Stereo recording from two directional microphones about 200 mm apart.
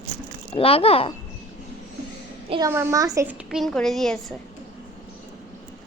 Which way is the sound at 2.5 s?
15° right (ahead or behind).